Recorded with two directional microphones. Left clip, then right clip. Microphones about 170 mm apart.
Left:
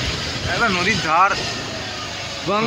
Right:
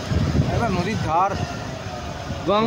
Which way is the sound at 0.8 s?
10° right (ahead or behind).